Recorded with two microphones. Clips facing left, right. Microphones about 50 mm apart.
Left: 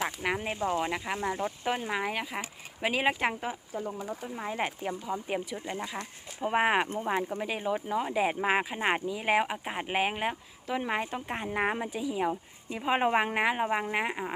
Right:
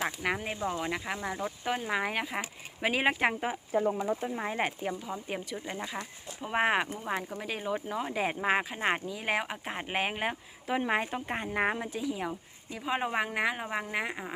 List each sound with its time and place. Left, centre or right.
0.0 s speech: centre
3.7 s speech: right
4.0 s speech: right
4.4 s speech: centre